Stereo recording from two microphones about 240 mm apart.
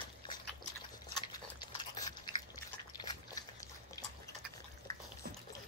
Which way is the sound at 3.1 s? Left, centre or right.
Centre.